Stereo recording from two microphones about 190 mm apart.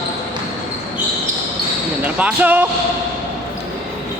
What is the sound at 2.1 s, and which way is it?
Speech, 10° right (ahead or behind).